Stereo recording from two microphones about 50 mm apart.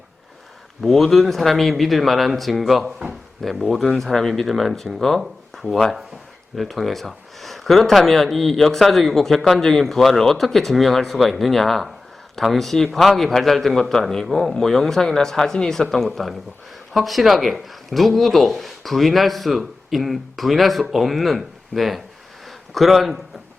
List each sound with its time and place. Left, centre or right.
0.8 s speech: centre